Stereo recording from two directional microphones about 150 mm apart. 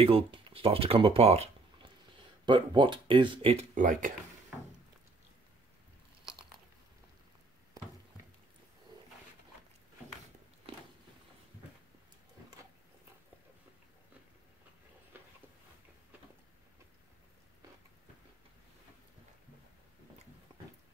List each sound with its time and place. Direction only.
0.0 s speech: 40° right (ahead or behind)
2.4 s speech: 30° right (ahead or behind)
3.7 s speech: 60° right (ahead or behind)